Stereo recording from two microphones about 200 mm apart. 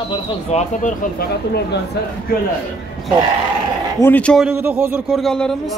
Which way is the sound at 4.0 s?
10° left (ahead or behind).